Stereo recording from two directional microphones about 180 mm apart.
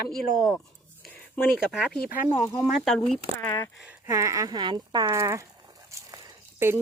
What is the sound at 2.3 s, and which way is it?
Speech, 30° left (ahead or behind).